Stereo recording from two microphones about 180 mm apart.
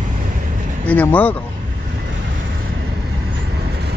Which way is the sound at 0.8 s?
10° left (ahead or behind).